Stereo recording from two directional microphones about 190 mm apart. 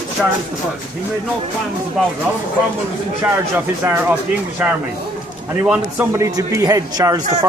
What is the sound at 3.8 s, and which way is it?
Speech, 10° right (ahead or behind).